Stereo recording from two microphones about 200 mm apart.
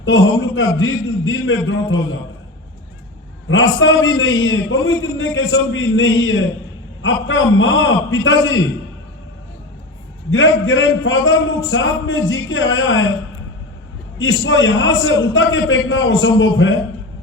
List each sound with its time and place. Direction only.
0.0 s a man's voice: 70° left (ahead or behind)
3.5 s a man's voice: 70° left (ahead or behind)
10.3 s a man's voice: 70° left (ahead or behind)
14.2 s a man's voice: 70° left (ahead or behind)